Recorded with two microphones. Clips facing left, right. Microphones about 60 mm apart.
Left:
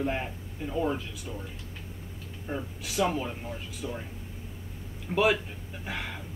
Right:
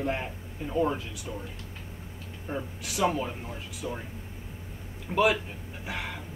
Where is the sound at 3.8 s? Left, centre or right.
Centre.